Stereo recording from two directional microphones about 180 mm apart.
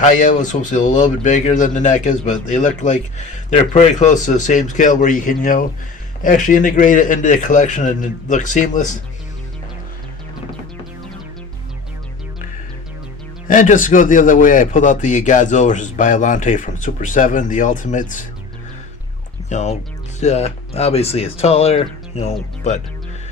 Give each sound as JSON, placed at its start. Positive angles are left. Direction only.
{"t": 0.0, "sound": "speech", "side_deg": 45}
{"t": 13.5, "sound": "speech", "side_deg": 45}
{"t": 19.5, "sound": "speech", "side_deg": 40}